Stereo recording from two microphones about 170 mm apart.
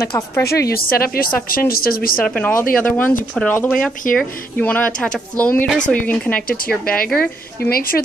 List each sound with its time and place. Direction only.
0.0 s a woman's voice: 15° left (ahead or behind)
0.7 s a woman's voice: 60° left (ahead or behind)
2.2 s a woman's voice: 10° left (ahead or behind)
7.7 s a woman's voice: 60° left (ahead or behind)